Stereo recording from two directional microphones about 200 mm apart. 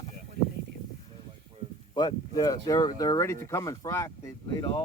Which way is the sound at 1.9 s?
20° left (ahead or behind).